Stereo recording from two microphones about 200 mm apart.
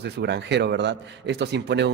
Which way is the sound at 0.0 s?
60° right (ahead or behind).